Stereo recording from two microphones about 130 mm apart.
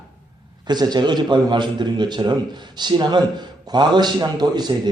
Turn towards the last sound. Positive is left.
turn(degrees=-30)  # may be behind; listen again after turning